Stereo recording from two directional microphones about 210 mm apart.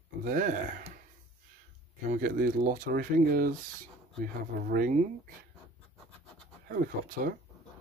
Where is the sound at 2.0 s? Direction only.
45° right (ahead or behind).